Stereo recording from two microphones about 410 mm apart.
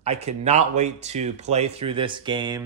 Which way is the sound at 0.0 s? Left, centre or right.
Centre.